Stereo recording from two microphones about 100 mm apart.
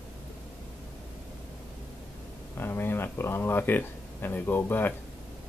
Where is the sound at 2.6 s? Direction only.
20° left (ahead or behind).